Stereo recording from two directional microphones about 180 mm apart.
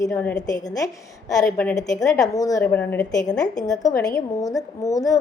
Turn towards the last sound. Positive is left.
turn(degrees=20)  # may be behind; listen again after turning